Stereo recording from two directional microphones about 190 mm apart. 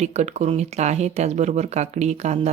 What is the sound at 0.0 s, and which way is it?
Speech, 35° right (ahead or behind).